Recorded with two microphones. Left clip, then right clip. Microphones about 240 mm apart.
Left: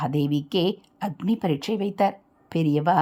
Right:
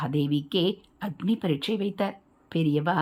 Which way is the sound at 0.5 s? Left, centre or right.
Centre.